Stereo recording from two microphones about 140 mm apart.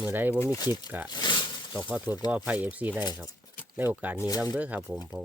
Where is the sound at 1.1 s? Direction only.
30° left (ahead or behind).